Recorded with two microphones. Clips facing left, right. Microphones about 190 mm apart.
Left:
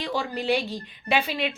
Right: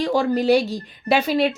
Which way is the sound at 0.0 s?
45° right (ahead or behind).